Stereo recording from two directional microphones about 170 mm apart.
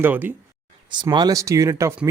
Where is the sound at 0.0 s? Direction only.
10° right (ahead or behind).